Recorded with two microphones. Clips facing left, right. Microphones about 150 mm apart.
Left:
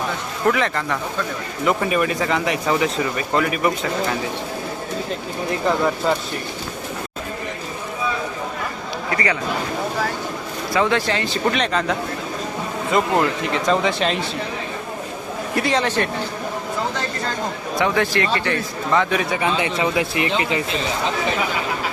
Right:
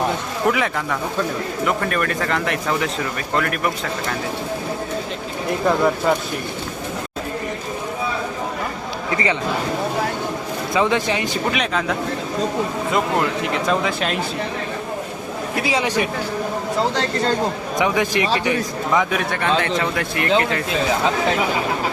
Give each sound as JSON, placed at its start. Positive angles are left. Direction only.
{"t": 0.4, "sound": "speech", "side_deg": -5}
{"t": 1.6, "sound": "a man's voice", "side_deg": 5}
{"t": 5.5, "sound": "a man's voice", "side_deg": 0}
{"t": 9.1, "sound": "a man's voice", "side_deg": -20}
{"t": 10.8, "sound": "speech", "side_deg": -20}
{"t": 11.5, "sound": "a man's voice", "side_deg": -5}
{"t": 15.5, "sound": "speech", "side_deg": -5}
{"t": 16.9, "sound": "speech", "side_deg": -30}
{"t": 17.7, "sound": "a man's voice", "side_deg": -15}